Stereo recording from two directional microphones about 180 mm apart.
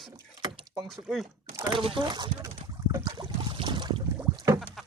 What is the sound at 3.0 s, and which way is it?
Boat, 25° right (ahead or behind).